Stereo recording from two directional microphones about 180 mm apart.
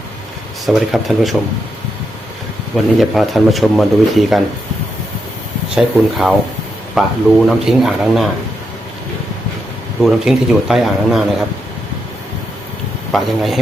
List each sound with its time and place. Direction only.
0.6 s speech: centre (ahead or behind)
3.0 s speech: centre (ahead or behind)
5.7 s speech: centre (ahead or behind)
10.0 s speech: centre (ahead or behind)
13.1 s speech: centre (ahead or behind)